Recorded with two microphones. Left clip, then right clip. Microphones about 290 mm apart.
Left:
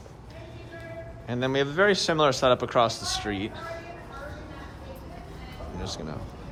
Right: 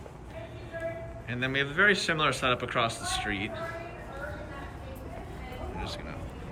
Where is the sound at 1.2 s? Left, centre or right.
Centre.